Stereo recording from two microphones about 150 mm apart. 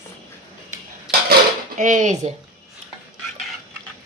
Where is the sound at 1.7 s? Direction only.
55° right (ahead or behind).